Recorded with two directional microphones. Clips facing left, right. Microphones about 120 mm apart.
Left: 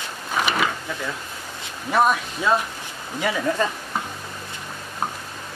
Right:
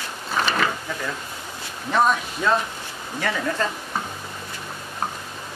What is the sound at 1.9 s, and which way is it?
Speech, 10° left (ahead or behind).